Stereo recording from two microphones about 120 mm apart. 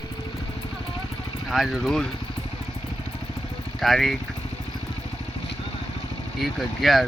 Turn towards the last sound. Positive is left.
turn(degrees=0)  # may be behind; listen again after turning